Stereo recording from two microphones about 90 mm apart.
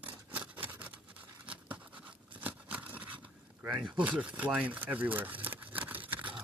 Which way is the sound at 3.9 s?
15° right (ahead or behind).